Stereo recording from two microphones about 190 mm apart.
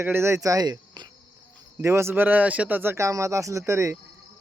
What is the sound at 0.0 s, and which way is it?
Speech, 10° right (ahead or behind).